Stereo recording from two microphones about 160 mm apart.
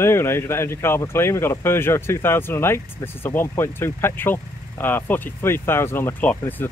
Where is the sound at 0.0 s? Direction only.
15° left (ahead or behind).